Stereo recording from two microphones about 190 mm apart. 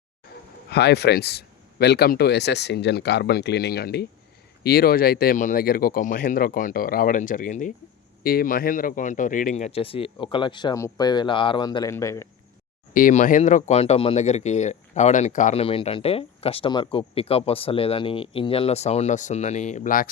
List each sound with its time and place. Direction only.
0.7 s speech: 60° left (ahead or behind); by 12.3 s 15° left (ahead or behind)
12.9 s speech: 45° left (ahead or behind)